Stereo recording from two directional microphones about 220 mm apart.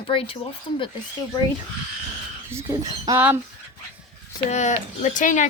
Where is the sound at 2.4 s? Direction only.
15° right (ahead or behind).